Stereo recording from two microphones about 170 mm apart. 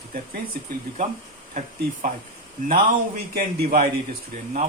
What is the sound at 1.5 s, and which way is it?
Speech, 45° right (ahead or behind).